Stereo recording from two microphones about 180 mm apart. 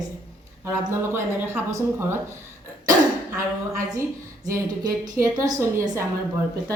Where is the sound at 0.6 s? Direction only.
10° right (ahead or behind).